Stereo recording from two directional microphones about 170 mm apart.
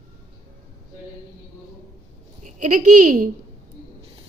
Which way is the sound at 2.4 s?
45° right (ahead or behind).